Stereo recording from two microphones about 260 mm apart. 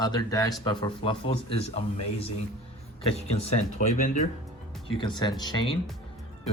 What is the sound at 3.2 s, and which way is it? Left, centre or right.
Speech, left.